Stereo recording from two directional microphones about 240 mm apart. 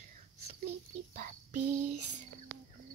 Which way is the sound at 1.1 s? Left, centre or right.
Right.